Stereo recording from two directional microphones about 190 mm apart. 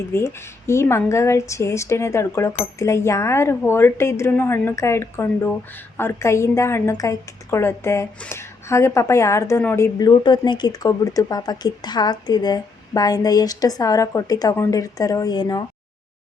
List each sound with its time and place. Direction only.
0.1 s a woman's voice: 15° left (ahead or behind)